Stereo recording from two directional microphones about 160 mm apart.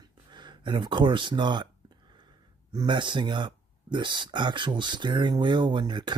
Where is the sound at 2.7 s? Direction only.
30° right (ahead or behind).